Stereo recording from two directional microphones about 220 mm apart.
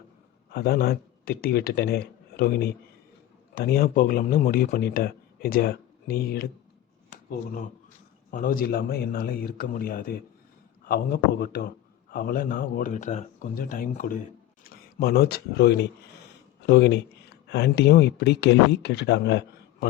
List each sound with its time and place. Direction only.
0.5 s speech: 45° left (ahead or behind)